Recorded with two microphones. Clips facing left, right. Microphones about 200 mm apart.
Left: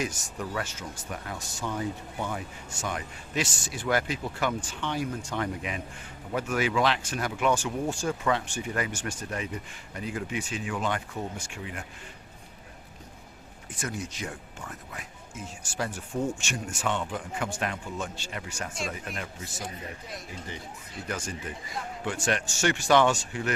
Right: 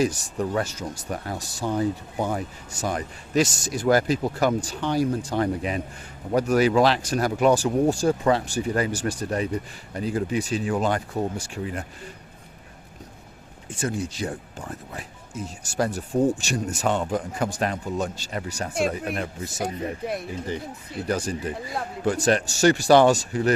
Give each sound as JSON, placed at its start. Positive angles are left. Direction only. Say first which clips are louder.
{"t": 0.0, "sound": "speech", "louder": "right 9 dB", "side_deg": -35}
{"t": 13.7, "sound": "speech", "louder": "right 7 dB", "side_deg": -30}
{"t": 18.7, "sound": "speech", "louder": "right 13 dB", "side_deg": -60}
{"t": 19.1, "sound": "speech", "louder": "right 8 dB", "side_deg": -35}
{"t": 19.5, "sound": "speech", "louder": "right 11 dB", "side_deg": -65}
{"t": 21.1, "sound": "speech", "louder": "right 9 dB", "side_deg": -35}